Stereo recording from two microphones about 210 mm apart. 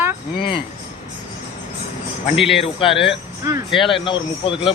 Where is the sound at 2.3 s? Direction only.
Centre (ahead or behind).